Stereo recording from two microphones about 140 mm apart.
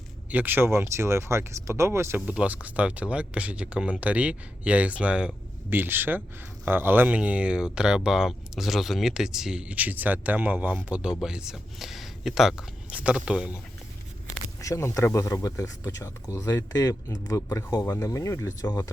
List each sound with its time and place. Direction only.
0.3 s speech: 10° right (ahead or behind)
14.6 s speech: 20° left (ahead or behind)